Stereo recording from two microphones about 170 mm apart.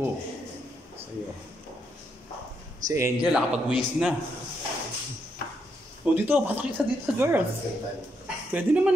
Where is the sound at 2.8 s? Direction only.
15° right (ahead or behind).